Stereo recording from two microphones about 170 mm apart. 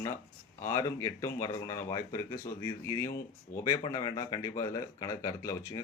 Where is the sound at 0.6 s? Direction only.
15° left (ahead or behind).